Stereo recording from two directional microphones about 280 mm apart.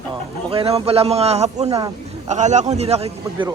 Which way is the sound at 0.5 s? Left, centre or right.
Right.